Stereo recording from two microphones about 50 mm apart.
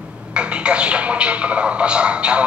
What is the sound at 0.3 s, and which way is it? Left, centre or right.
Speech, right.